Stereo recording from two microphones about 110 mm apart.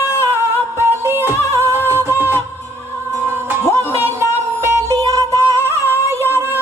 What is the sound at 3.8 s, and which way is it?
Music, 20° left (ahead or behind).